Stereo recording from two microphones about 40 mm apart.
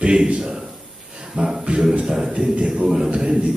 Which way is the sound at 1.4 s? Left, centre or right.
Centre.